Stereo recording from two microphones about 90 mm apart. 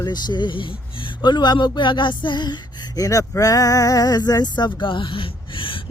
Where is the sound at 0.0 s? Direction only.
50° left (ahead or behind).